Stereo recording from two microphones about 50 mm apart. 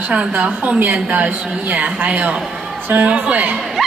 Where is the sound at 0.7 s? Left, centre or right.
Right.